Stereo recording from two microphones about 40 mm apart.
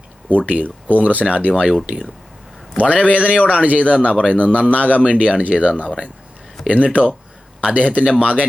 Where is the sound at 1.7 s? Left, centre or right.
Centre.